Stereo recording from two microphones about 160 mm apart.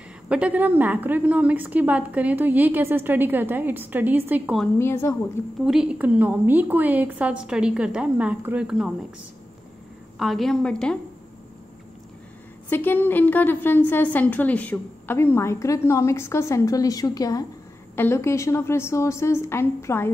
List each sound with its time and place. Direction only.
0.3 s a woman's voice: 10° right (ahead or behind)
4.7 s a woman's voice: 15° left (ahead or behind)
5.7 s a woman's voice: 5° right (ahead or behind)
10.1 s a woman's voice: centre (ahead or behind)
12.6 s a woman's voice: 15° left (ahead or behind)